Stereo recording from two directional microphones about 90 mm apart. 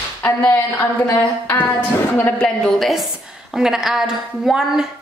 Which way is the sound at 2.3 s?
10° left (ahead or behind).